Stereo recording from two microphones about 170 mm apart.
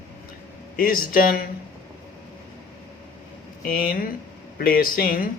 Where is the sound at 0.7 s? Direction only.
55° left (ahead or behind).